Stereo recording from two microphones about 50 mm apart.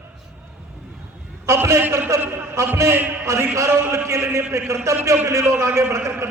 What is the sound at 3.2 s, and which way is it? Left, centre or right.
A man's voice, right.